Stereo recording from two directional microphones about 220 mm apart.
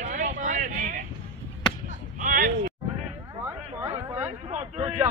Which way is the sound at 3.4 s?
10° right (ahead or behind).